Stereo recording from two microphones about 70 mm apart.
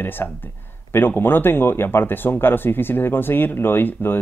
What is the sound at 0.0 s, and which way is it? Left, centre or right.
Speech, left.